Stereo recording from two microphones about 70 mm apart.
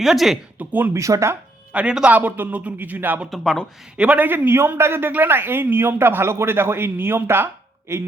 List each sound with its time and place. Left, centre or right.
0.0 s speech: centre
0.6 s a man's voice: right
0.9 s speech: right
1.7 s a man's voice: centre
3.2 s speech: centre
3.9 s a man's voice: centre; by 8.0 s right